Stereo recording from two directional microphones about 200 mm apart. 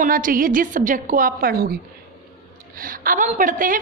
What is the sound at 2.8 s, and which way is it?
A woman's voice, 45° right (ahead or behind).